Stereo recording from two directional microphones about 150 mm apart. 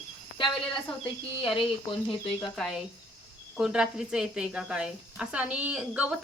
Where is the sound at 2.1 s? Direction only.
35° left (ahead or behind).